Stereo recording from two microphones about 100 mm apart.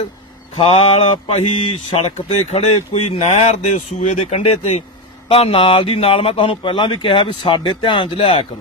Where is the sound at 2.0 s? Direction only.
90° left.